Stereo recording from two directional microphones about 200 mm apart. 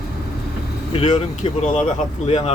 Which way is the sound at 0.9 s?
30° left (ahead or behind).